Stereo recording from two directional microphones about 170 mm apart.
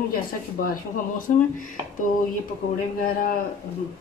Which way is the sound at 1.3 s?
55° left (ahead or behind).